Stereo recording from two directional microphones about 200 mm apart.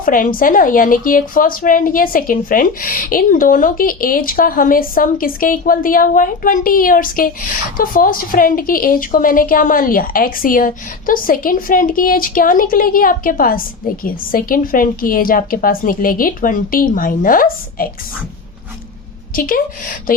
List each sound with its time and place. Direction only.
0.0 s a woman's voice: 45° left (ahead or behind)
19.4 s a woman's voice: 45° left (ahead or behind)